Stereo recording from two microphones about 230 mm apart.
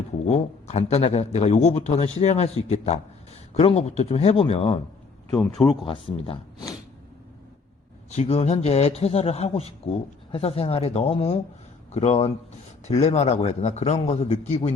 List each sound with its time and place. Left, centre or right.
0.3 s a man's voice: left
5.4 s speech: centre
5.8 s speech: left
8.1 s a man's voice: left